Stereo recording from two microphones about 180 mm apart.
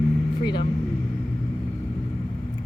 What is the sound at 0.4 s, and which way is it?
Speech, 25° left (ahead or behind).